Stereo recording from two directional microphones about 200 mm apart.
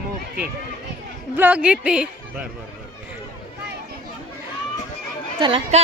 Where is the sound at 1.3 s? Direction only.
10° right (ahead or behind).